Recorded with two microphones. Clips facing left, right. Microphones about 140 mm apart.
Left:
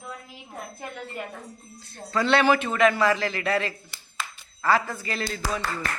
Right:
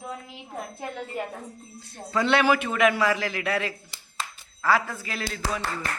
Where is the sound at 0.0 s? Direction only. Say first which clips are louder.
Right 3 dB; 20° right (ahead or behind).